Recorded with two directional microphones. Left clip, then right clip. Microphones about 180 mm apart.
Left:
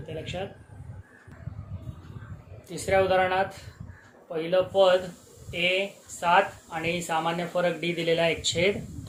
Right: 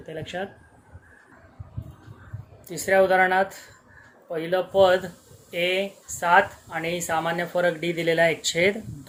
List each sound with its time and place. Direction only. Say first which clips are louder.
0.1 s speech: right 3 dB; 40° right (ahead or behind)
2.6 s speech: right 4 dB; 40° right (ahead or behind)